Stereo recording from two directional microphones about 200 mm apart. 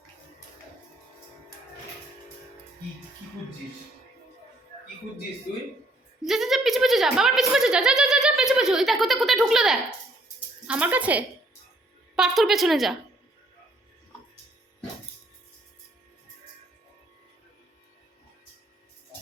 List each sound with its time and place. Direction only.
6.2 s a woman's voice: centre (ahead or behind)